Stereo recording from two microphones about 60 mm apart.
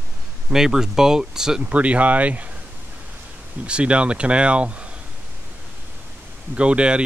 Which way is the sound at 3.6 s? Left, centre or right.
Centre.